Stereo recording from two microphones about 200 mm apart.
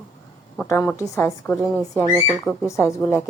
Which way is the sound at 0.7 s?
15° left (ahead or behind).